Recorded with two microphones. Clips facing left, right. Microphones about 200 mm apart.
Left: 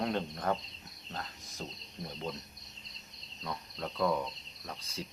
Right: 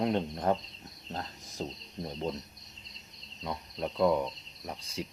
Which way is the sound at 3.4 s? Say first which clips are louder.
Right 4 dB; 20° right (ahead or behind).